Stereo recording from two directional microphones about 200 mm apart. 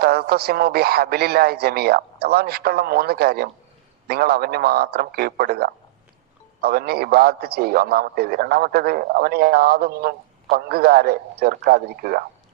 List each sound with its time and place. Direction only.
0.0 s a man's voice: 50° right (ahead or behind)